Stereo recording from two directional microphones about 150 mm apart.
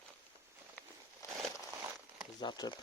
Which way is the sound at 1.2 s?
20° left (ahead or behind).